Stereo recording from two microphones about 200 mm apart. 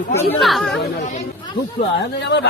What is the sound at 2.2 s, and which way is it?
Speech, 60° left (ahead or behind).